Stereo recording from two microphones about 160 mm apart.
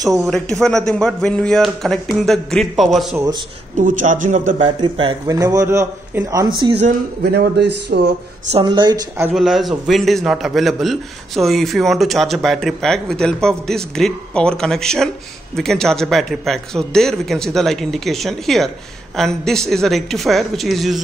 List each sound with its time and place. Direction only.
0.2 s a man's voice: 5° left (ahead or behind)
3.2 s a man's voice: 25° right (ahead or behind)
3.7 s a man's voice: 50° right (ahead or behind)
4.7 s a man's voice: 30° right (ahead or behind)
7.2 s a man's voice: 85° right
8.6 s a man's voice: 25° right (ahead or behind)
9.3 s a man's voice: centre (ahead or behind)